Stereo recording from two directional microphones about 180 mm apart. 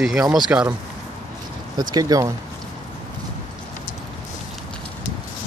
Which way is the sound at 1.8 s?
20° right (ahead or behind).